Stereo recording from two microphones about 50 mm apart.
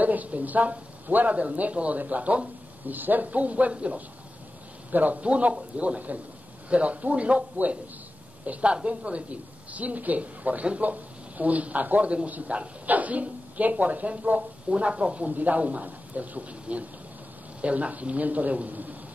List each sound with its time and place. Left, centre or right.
0.0 s speech: right